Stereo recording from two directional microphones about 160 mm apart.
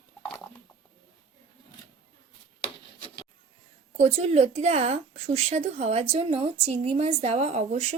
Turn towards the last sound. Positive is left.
turn(degrees=-45)  # may be behind; listen again after turning